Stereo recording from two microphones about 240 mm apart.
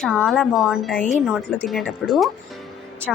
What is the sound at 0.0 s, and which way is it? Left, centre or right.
Speech, centre.